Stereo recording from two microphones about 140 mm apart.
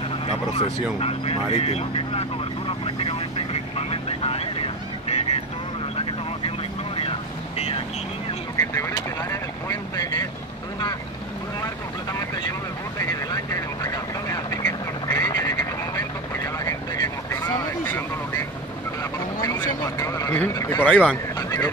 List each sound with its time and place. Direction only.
0.3 s speech: 45° left (ahead or behind)
7.0 s vehicle: 45° left (ahead or behind)
8.5 s speech: 20° left (ahead or behind)
13.3 s quack: 25° left (ahead or behind)
16.5 s vehicle: 25° left (ahead or behind)
19.4 s speech: 25° left (ahead or behind)
20.9 s speech: 5° left (ahead or behind)